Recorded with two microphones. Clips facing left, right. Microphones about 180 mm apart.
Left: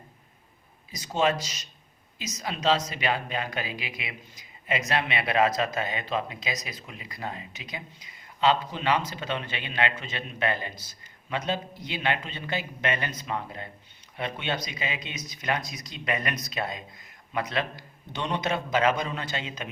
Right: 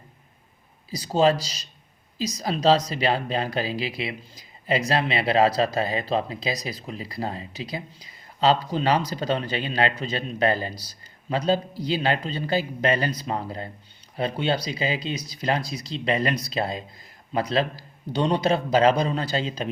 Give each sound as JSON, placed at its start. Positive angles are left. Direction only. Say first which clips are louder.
{"t": 0.9, "sound": "speech", "louder": "right 5 dB", "side_deg": -35}